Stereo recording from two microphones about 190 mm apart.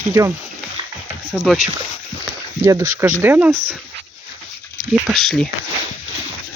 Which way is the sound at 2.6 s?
15° right (ahead or behind).